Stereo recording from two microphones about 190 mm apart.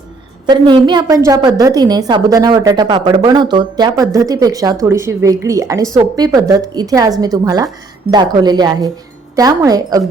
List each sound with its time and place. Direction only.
0.4 s a woman's voice: 20° right (ahead or behind)